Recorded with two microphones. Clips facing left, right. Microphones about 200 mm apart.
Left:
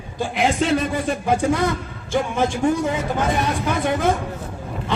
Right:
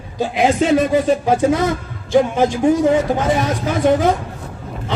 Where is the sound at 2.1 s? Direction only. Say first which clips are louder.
Right 6 dB; 55° right (ahead or behind).